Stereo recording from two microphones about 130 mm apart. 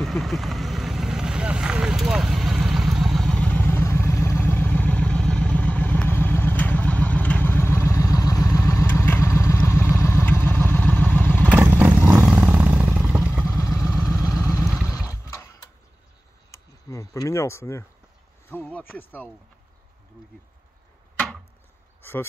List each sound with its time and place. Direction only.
0.0 s vehicle: centre (ahead or behind); by 11.5 s 15° left (ahead or behind)
11.5 s vehicle: 15° right (ahead or behind)
13.5 s vehicle: 25° left (ahead or behind)
15.2 s tick-tock: 25° left (ahead or behind)
16.4 s a sound: 25° left (ahead or behind)
18.5 s speech: 15° left (ahead or behind)